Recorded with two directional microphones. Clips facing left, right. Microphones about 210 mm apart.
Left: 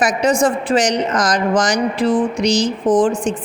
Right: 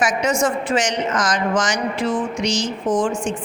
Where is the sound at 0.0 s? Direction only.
35° left (ahead or behind).